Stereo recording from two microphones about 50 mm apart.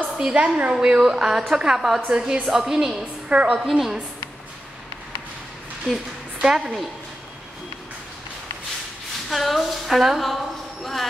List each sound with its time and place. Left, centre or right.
0.4 s a woman's voice: right
0.7 s speech: centre
3.3 s a woman's voice: right
3.6 s a woman's voice: centre
6.4 s speech: centre
9.3 s a woman's voice: centre